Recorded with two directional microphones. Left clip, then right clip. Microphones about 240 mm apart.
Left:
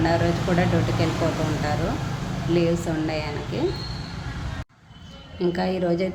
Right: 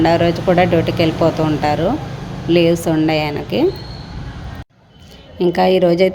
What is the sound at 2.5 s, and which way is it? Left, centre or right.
A woman's voice, right.